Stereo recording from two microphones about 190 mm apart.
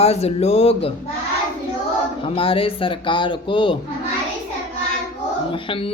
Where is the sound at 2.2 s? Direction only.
30° left (ahead or behind).